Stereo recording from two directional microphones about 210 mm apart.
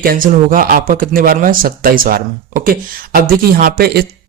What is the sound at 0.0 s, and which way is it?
Speech, 40° right (ahead or behind).